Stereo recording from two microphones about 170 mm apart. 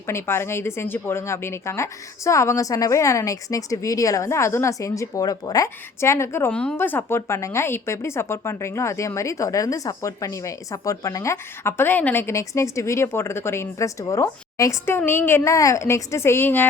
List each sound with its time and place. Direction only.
0.1 s speech: 15° left (ahead or behind)